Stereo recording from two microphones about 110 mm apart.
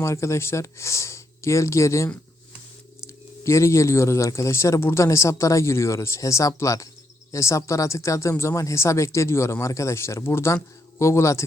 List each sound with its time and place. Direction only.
0.0 s speech: 25° left (ahead or behind)
3.4 s speech: 25° left (ahead or behind)